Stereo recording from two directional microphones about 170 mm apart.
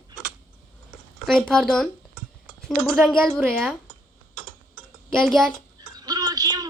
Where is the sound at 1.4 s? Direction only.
5° left (ahead or behind).